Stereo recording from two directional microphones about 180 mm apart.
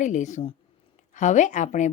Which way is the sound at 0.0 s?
40° left (ahead or behind).